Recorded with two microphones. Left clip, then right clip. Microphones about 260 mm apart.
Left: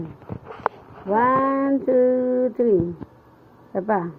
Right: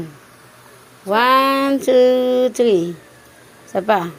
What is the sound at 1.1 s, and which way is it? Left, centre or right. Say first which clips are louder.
A woman's voice: right 5 dB; right.